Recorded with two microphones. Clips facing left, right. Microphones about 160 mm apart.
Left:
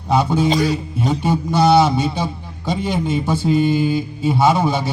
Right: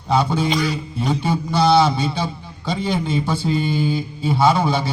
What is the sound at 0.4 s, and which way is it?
Speech, 40° left (ahead or behind).